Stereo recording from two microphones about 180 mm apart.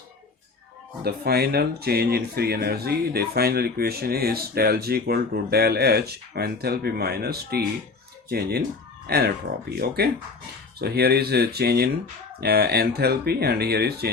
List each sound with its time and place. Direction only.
1.0 s speech: 60° right (ahead or behind)